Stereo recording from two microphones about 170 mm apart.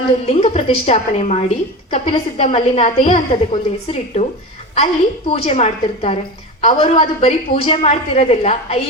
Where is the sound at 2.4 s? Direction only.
45° left (ahead or behind).